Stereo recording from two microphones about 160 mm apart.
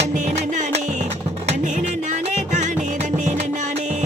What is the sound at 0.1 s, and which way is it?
Music, 50° right (ahead or behind).